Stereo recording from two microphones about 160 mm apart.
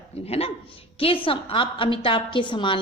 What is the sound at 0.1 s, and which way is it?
A woman's voice, 40° left (ahead or behind).